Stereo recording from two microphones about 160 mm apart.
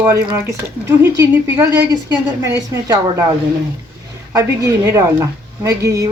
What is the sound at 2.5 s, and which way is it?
Speech, 20° right (ahead or behind).